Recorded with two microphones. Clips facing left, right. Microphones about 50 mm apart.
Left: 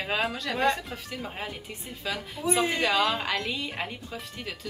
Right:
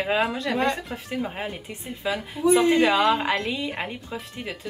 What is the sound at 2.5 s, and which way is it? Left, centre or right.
Speech, centre.